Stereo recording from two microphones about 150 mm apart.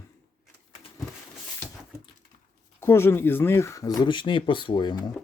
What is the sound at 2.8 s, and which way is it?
Speech, 15° left (ahead or behind).